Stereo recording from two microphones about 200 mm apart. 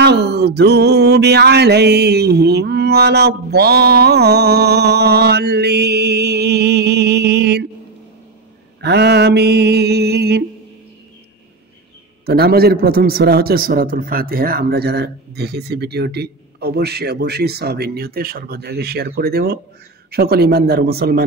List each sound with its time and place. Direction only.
0.0 s mantra: 55° right (ahead or behind)
8.8 s mantra: 55° right (ahead or behind)
12.3 s a man's voice: 50° right (ahead or behind)